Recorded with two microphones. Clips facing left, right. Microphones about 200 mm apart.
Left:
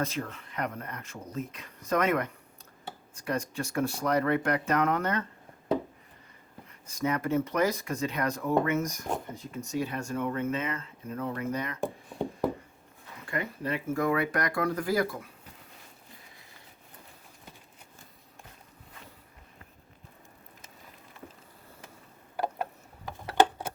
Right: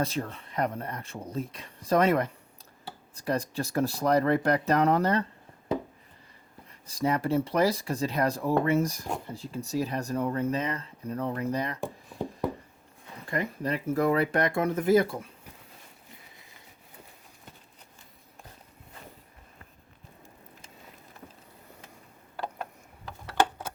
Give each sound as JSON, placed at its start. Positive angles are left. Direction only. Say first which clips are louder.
{"t": 0.0, "sound": "speech", "louder": "right 2 dB", "side_deg": -30}
{"t": 6.8, "sound": "speech", "louder": "right 2 dB", "side_deg": -35}
{"t": 11.8, "sound": "chopping", "louder": "left 2 dB", "side_deg": 0}
{"t": 13.2, "sound": "speech", "louder": "right 3 dB", "side_deg": -35}